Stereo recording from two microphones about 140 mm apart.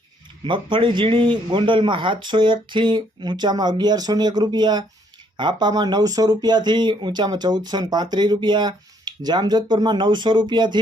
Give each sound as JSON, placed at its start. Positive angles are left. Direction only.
{"t": 0.4, "sound": "speech", "side_deg": -35}